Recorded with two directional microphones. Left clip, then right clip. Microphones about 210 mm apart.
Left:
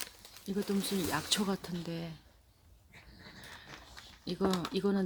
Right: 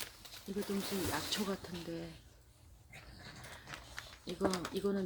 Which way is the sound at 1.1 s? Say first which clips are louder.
Left 5 dB; 55° left (ahead or behind).